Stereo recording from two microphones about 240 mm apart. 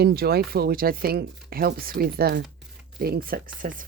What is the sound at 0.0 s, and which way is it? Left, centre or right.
Speech, right.